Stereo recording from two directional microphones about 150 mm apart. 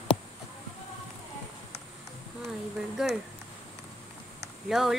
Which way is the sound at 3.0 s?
5° right (ahead or behind).